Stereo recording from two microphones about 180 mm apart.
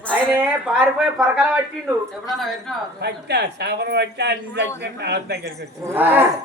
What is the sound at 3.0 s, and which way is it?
A man's voice, 65° right (ahead or behind).